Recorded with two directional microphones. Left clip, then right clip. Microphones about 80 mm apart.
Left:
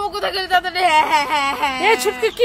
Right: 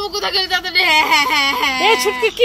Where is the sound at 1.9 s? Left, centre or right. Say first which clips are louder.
Right 2 dB; centre.